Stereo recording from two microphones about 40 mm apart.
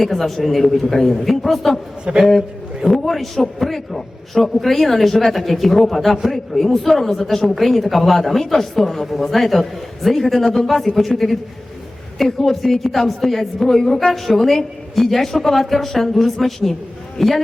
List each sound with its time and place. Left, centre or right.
0.0 s a woman's voice: centre
2.1 s a man's voice: right
2.8 s a woman's voice: centre